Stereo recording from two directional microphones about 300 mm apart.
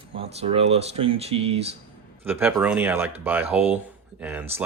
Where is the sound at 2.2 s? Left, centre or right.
Centre.